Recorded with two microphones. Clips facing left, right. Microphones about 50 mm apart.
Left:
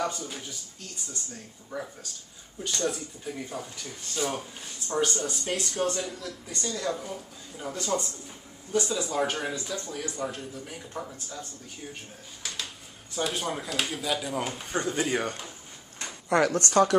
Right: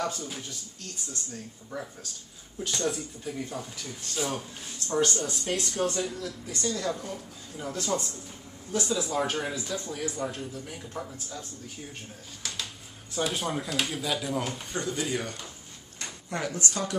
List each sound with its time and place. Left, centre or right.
0.0 s speech: centre
12.4 s a sound: centre
13.1 s speech: centre
16.3 s speech: left